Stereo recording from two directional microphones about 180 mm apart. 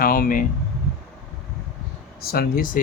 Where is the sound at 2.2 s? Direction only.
60° left (ahead or behind).